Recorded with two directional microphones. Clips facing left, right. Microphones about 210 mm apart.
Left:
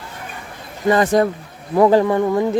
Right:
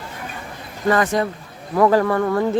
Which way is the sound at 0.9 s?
25° left (ahead or behind).